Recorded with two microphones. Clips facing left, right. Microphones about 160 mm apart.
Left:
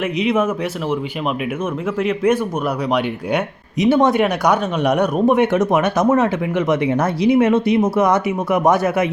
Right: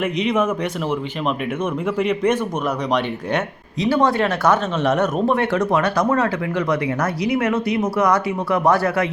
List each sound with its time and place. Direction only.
0.0 s speech: 5° left (ahead or behind)
2.0 s speech: 5° left (ahead or behind)
3.8 s speech: 20° left (ahead or behind)